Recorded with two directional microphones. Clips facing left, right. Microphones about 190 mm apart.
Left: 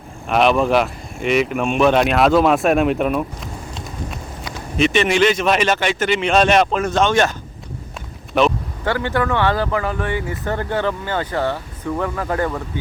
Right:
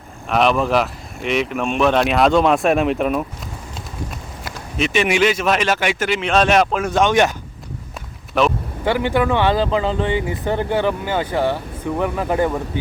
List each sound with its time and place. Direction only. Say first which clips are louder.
0.3 s speech: left 1 dB; centre (ahead or behind)
4.4 s speech: left 4 dB; centre (ahead or behind)
8.8 s speech: right 2 dB; 15° right (ahead or behind)